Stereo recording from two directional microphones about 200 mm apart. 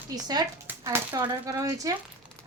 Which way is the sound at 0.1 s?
20° right (ahead or behind).